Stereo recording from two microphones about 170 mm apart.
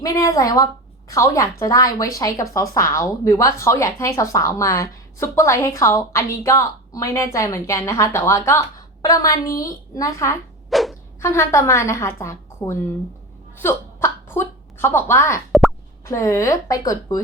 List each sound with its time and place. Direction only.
0.0 s a woman's voice: 20° left (ahead or behind)
10.7 s a sound: centre (ahead or behind)
11.2 s a woman's voice: 15° left (ahead or behind)